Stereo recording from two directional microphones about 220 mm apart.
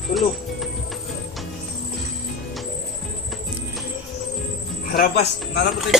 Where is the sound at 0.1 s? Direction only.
Centre (ahead or behind).